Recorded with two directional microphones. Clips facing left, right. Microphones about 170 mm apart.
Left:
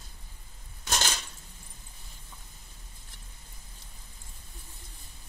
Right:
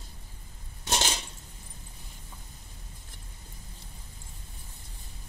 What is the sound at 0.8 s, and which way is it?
Coin, 25° right (ahead or behind).